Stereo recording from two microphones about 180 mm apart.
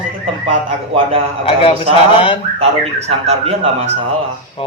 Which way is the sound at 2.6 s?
35° right (ahead or behind).